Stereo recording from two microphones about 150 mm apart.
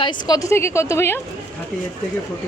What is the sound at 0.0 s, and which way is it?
Speech, 30° left (ahead or behind).